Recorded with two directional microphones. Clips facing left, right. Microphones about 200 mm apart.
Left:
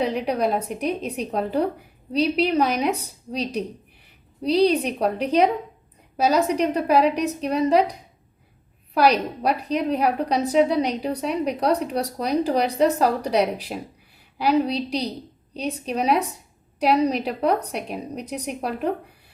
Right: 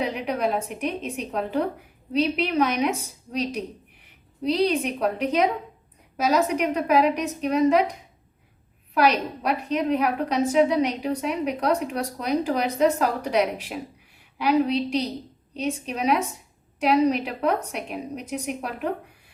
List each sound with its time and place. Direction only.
0.0 s a woman's voice: 35° left (ahead or behind)
4.4 s a woman's voice: 35° left (ahead or behind)
9.0 s a woman's voice: 35° left (ahead or behind)